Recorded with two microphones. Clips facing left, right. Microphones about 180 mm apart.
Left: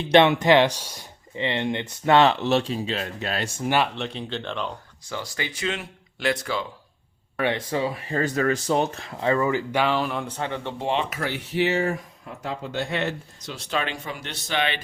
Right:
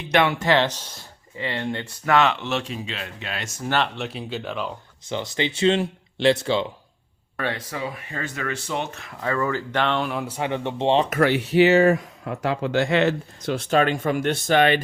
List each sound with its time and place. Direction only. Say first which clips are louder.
0.0 s speech: left 4 dB; 25° left (ahead or behind)
3.9 s speech: even; 5° right (ahead or behind)
5.0 s speech: right 6 dB; 20° right (ahead or behind)
7.3 s speech: left 3 dB; 15° left (ahead or behind)
7.7 s speech: left 5 dB; 30° left (ahead or behind); by 11.1 s 30° right (ahead or behind)
11.2 s speech: right 8 dB; 75° right (ahead or behind)
13.4 s speech: right 8 dB; 55° right (ahead or behind)